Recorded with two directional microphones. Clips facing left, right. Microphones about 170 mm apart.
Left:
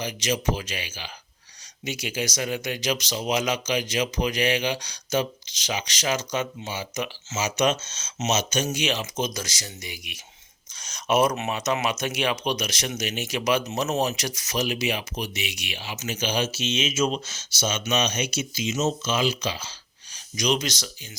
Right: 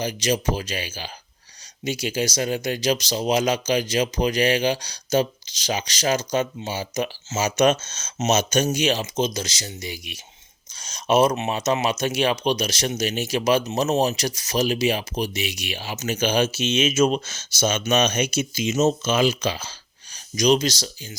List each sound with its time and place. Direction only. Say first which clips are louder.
0.0 s speech: right 3 dB; 35° right (ahead or behind)